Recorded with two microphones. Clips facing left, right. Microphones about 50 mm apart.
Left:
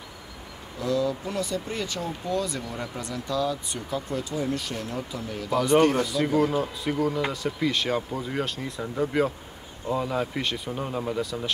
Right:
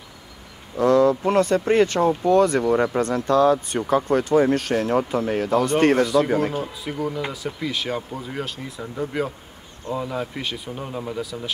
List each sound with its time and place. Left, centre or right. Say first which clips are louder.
0.7 s speech: right 10 dB; right
6.6 s speech: left 1 dB; centre